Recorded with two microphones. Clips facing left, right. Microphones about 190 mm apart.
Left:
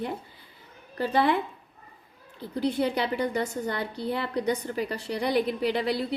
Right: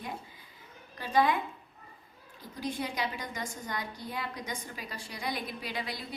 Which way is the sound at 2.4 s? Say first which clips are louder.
Left 10 dB; 65° left (ahead or behind).